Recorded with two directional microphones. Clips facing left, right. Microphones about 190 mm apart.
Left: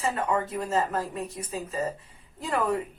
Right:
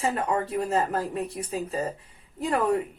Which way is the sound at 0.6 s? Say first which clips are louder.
Right 2 dB; 30° right (ahead or behind).